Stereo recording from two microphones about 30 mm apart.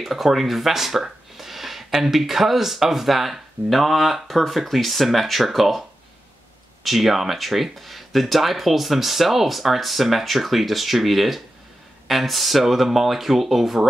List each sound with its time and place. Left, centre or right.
0.0 s speech: centre
1.3 s a sound: centre
1.9 s speech: centre
2.1 s speech: centre